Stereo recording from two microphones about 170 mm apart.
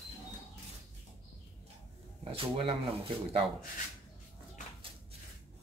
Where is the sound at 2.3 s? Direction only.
35° right (ahead or behind).